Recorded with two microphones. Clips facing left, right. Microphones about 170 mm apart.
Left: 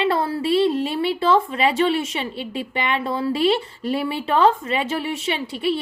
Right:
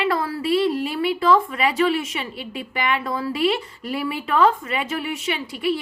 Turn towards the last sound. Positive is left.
turn(degrees=30)  # may be behind; listen again after turning